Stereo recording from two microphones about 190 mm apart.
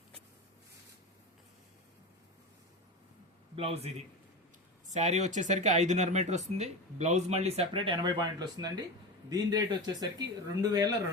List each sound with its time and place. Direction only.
3.5 s speech: 30° right (ahead or behind)
4.9 s speech: 35° right (ahead or behind); by 10.9 s 20° right (ahead or behind)